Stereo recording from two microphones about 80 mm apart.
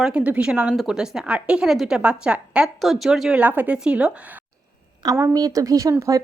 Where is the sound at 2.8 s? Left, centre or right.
Centre.